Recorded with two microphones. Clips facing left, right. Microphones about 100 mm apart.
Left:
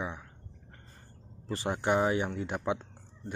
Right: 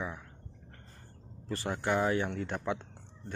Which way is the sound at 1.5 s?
20° left (ahead or behind).